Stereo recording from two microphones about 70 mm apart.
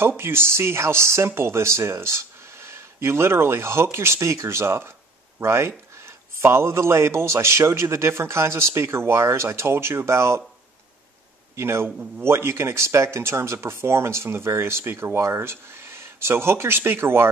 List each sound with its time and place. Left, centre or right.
0.2 s a man's voice: right
11.5 s a man's voice: right